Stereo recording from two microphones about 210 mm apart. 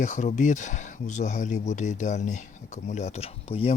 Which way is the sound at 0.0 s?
35° left (ahead or behind).